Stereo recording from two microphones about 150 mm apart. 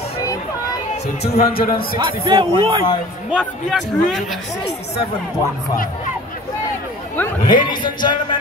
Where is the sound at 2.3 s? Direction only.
30° right (ahead or behind).